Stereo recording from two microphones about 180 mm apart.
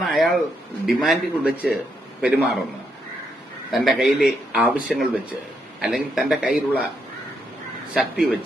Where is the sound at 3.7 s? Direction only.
5° right (ahead or behind).